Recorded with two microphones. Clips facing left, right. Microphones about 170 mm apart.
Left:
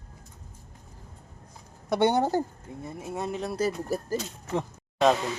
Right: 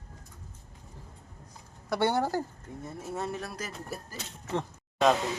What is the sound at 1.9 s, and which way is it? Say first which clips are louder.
A woman's voice: left 4 dB; 20° left (ahead or behind).